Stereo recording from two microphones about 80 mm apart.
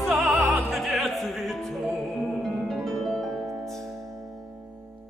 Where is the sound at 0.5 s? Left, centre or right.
Centre.